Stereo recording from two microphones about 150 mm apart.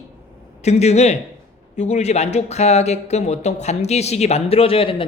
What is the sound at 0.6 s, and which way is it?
Speech, 45° left (ahead or behind).